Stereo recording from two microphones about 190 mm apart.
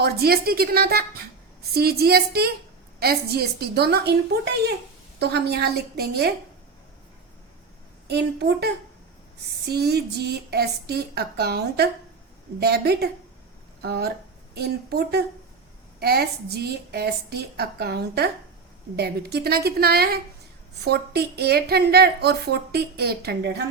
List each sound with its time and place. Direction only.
0.0 s a woman's voice: 55° right (ahead or behind)
5.2 s a woman's voice: 60° right (ahead or behind)
8.0 s a woman's voice: 60° right (ahead or behind)